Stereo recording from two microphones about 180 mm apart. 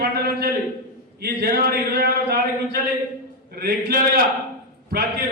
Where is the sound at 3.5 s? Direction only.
60° right (ahead or behind).